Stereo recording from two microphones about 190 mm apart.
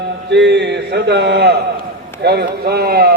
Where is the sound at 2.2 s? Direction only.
60° right (ahead or behind).